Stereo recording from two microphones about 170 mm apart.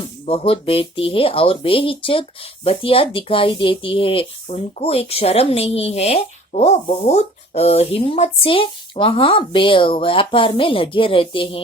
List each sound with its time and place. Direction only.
0.3 s speech: 35° left (ahead or behind)